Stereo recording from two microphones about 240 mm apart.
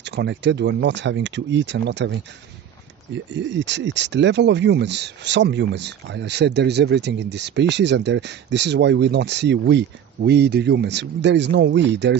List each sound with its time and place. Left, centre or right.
0.0 s speech: right
3.3 s speech: right